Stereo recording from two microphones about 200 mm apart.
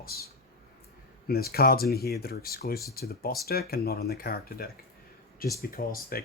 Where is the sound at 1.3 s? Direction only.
50° left (ahead or behind).